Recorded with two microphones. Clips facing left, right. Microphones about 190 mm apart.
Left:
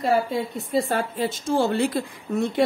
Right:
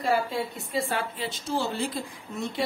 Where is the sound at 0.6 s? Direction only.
40° left (ahead or behind); by 2.0 s 65° left (ahead or behind).